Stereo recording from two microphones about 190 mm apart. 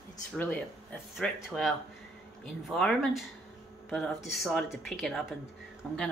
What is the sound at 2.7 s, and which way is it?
Speech, centre (ahead or behind).